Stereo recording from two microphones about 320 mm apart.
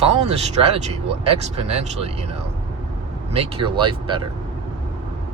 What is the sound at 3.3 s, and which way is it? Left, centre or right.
Speech, centre.